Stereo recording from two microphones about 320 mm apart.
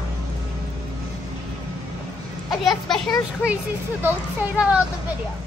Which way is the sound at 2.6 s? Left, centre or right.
Centre.